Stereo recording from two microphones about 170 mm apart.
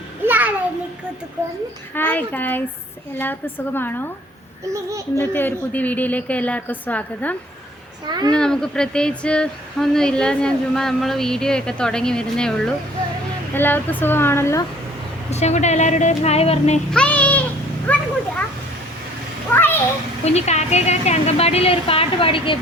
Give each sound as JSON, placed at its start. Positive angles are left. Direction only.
{"t": 0.3, "sound": "a sound", "side_deg": -10}
{"t": 2.0, "sound": "a woman's voice", "side_deg": 10}
{"t": 4.7, "sound": "speech", "side_deg": -20}
{"t": 5.1, "sound": "a woman's voice", "side_deg": 10}
{"t": 8.0, "sound": "speech", "side_deg": -25}
{"t": 8.3, "sound": "a woman's voice", "side_deg": 5}
{"t": 15.3, "sound": "a woman's voice", "side_deg": 40}
{"t": 16.9, "sound": "a woman's voice", "side_deg": 5}
{"t": 19.5, "sound": "a sound", "side_deg": 10}
{"t": 20.2, "sound": "a woman's voice", "side_deg": 40}